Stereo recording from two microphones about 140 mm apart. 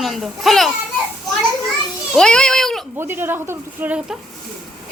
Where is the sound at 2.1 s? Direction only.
5° left (ahead or behind).